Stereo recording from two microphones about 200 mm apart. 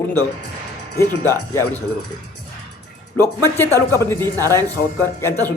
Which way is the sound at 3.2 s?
10° left (ahead or behind).